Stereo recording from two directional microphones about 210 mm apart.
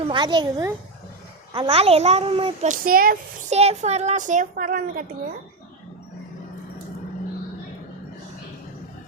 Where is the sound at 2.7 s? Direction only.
40° right (ahead or behind).